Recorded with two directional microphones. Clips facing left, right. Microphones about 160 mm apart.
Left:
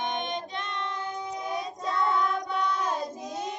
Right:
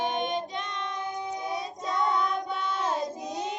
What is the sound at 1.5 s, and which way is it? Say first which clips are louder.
Child singing: left 1 dB; 20° right (ahead or behind).